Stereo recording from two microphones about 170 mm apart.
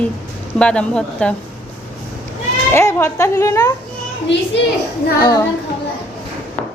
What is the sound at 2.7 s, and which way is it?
Speech, 15° left (ahead or behind).